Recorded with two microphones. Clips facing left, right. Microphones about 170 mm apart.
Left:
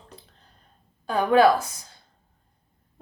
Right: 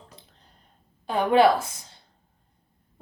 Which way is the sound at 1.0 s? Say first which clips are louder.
Left 1 dB; 20° right (ahead or behind).